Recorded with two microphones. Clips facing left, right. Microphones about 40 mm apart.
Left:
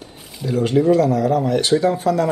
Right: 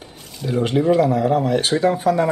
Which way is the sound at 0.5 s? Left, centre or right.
Right.